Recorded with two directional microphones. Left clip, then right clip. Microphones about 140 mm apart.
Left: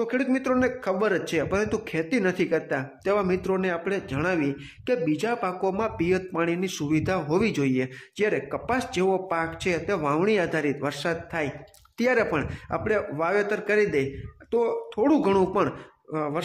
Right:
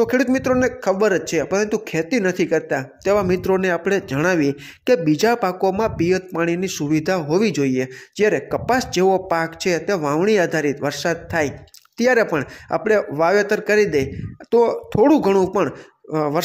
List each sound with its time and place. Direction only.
0.0 s speech: 40° right (ahead or behind)
0.4 s a man's voice: 30° right (ahead or behind)